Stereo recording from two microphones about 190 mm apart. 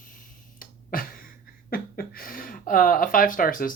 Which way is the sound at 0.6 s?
50° left (ahead or behind).